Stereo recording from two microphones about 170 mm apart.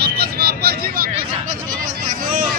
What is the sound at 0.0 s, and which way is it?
Vehicle, 65° right (ahead or behind).